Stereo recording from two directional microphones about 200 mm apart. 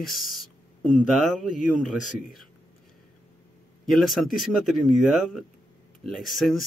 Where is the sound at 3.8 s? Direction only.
Centre (ahead or behind).